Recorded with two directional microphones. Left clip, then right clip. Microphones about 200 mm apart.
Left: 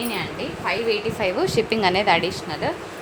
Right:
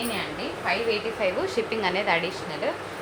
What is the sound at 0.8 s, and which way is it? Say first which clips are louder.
Speech: left 3 dB; 50° left (ahead or behind).